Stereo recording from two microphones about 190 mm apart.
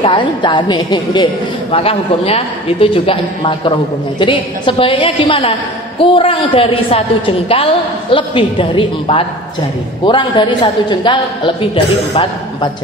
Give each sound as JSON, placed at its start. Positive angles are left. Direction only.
{"t": 0.0, "sound": "a woman's voice", "side_deg": 25}